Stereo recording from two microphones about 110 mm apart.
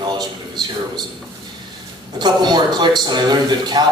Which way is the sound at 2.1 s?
40° right (ahead or behind).